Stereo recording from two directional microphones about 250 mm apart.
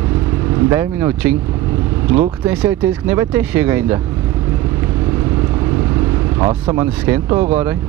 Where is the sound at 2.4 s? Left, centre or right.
Centre.